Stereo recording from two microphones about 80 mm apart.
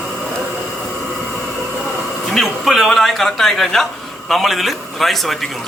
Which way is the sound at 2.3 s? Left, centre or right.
Centre.